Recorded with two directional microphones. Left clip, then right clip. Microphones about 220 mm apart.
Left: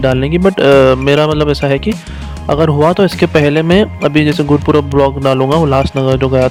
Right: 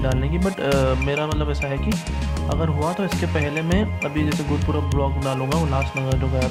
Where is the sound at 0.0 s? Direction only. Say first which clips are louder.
Left 13 dB; 45° left (ahead or behind).